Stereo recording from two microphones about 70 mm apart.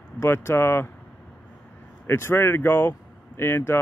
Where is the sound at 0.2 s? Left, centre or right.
Left.